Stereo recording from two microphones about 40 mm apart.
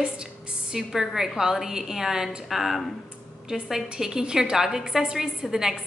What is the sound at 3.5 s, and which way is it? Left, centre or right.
A woman's voice, centre.